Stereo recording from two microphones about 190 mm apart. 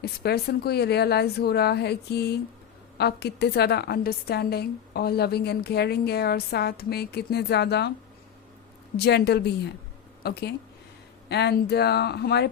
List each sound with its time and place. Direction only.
0.0 s a woman's voice: 55° left (ahead or behind)
9.0 s a woman's voice: 60° left (ahead or behind)